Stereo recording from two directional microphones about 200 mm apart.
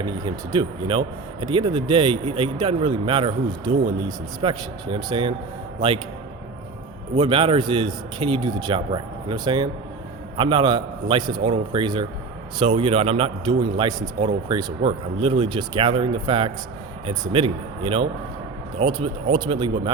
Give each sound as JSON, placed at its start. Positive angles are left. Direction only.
{"t": 0.0, "sound": "speech", "side_deg": -20}
{"t": 7.2, "sound": "speech", "side_deg": -25}